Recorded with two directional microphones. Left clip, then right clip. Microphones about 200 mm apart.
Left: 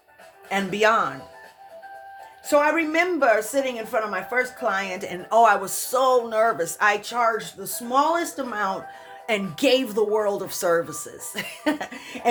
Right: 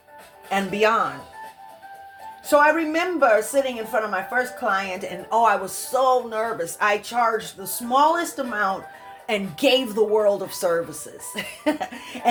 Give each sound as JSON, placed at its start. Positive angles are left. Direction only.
{"t": 0.5, "sound": "a woman's voice", "side_deg": 25}
{"t": 2.5, "sound": "a woman's voice", "side_deg": 25}